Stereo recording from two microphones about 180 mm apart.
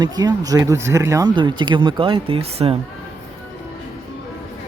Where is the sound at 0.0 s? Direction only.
20° right (ahead or behind).